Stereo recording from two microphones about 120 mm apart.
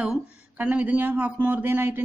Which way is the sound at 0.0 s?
10° right (ahead or behind).